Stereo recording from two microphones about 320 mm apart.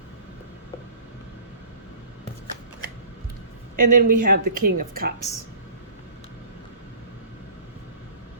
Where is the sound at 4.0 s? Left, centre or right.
Right.